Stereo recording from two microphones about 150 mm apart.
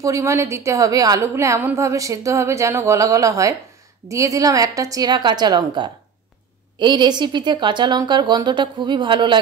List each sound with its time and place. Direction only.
0.0 s a woman's voice: 20° right (ahead or behind)